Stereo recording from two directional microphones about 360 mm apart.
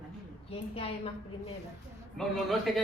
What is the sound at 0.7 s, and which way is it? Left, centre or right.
Speech, centre.